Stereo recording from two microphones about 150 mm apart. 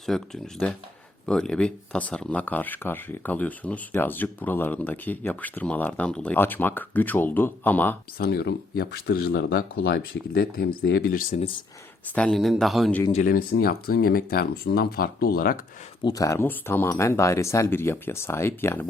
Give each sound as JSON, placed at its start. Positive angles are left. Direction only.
{"t": 0.1, "sound": "speech", "side_deg": 5}
{"t": 8.2, "sound": "speech", "side_deg": 90}
{"t": 12.1, "sound": "speech", "side_deg": 5}
{"t": 13.2, "sound": "speech", "side_deg": 75}
{"t": 16.0, "sound": "speech", "side_deg": 25}